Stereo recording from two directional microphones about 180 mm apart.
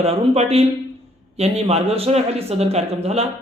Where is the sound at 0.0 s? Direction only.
35° right (ahead or behind).